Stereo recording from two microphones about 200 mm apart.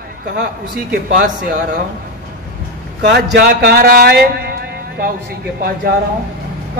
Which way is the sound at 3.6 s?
50° right (ahead or behind).